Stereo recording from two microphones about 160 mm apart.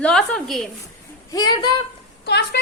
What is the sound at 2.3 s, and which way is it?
Speech, 90° left.